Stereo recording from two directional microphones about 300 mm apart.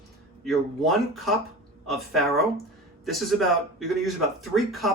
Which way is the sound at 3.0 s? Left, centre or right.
Centre.